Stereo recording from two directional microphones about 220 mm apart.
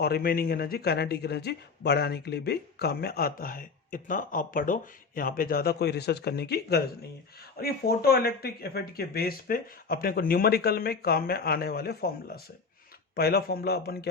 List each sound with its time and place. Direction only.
0.0 s speech: 45° left (ahead or behind)